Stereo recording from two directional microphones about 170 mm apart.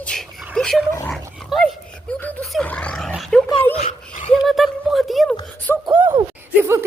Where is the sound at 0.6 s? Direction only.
5° left (ahead or behind).